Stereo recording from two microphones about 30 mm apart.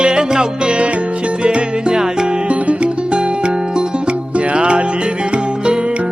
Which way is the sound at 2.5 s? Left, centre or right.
Right.